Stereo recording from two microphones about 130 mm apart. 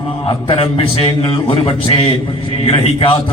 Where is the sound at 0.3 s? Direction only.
40° left (ahead or behind).